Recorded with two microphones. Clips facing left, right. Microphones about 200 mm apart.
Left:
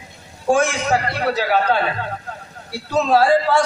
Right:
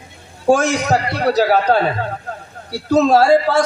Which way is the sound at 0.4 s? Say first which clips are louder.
Right 3 dB; 40° right (ahead or behind).